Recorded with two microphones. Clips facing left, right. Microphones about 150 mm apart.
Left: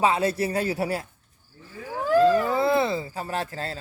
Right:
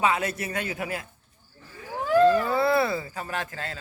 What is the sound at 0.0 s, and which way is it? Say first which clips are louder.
Speech: left 3 dB; 30° left (ahead or behind).